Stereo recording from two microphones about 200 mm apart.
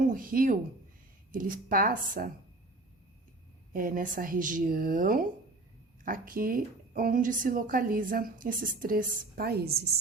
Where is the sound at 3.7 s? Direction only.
45° right (ahead or behind).